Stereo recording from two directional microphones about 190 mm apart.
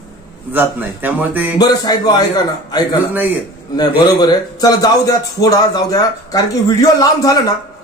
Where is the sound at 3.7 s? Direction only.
20° left (ahead or behind).